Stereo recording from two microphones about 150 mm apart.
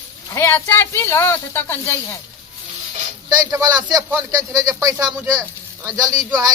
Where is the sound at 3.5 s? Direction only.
25° right (ahead or behind).